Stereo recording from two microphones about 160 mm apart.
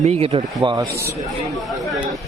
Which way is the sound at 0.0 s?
45° right (ahead or behind).